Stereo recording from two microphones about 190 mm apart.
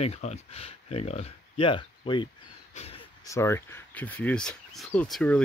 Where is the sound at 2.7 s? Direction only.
30° left (ahead or behind).